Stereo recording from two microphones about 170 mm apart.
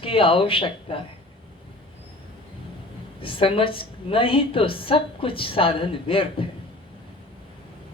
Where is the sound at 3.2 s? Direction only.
30° left (ahead or behind).